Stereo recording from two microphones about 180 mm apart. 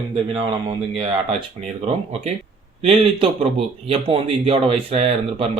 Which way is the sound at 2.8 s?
30° right (ahead or behind).